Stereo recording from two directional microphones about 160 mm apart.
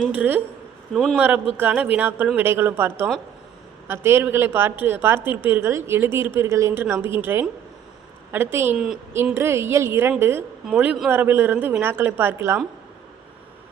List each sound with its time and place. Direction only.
0.1 s a woman's voice: 10° right (ahead or behind)